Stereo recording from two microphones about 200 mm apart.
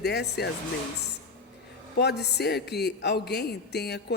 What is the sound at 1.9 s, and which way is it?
A man's voice, 55° left (ahead or behind).